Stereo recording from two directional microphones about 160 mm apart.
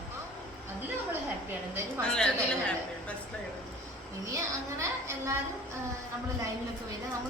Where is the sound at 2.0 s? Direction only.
5° left (ahead or behind).